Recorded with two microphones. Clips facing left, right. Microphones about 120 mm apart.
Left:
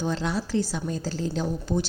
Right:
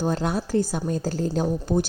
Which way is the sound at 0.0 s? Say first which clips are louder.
Right 3 dB; 50° right (ahead or behind).